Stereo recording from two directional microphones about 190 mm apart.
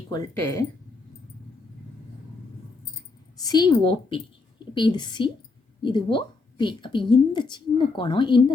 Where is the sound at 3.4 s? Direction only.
20° left (ahead or behind).